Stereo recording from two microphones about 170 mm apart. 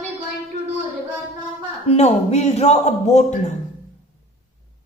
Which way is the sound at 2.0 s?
40° left (ahead or behind).